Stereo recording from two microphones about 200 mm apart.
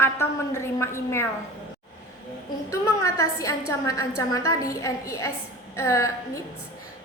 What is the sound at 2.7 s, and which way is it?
A woman's voice, 15° left (ahead or behind).